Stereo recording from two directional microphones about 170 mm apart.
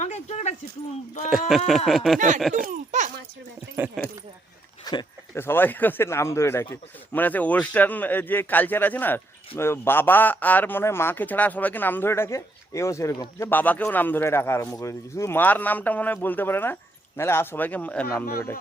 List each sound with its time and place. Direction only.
0.0 s a sound: 40° left (ahead or behind)
1.5 s speech: centre (ahead or behind)
2.1 s speech: 45° right (ahead or behind)
2.5 s a sound: 50° right (ahead or behind)
4.0 s speech: centre (ahead or behind)
4.9 s speech: 20° left (ahead or behind)